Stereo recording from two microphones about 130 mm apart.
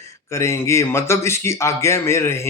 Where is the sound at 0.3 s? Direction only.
20° left (ahead or behind).